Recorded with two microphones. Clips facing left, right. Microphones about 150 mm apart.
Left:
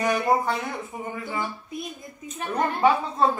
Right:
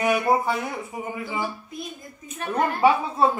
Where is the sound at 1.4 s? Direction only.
Centre (ahead or behind).